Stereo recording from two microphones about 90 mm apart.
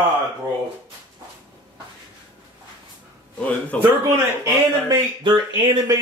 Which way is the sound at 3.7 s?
15° left (ahead or behind).